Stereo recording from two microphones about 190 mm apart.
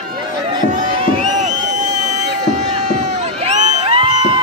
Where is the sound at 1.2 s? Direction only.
35° right (ahead or behind).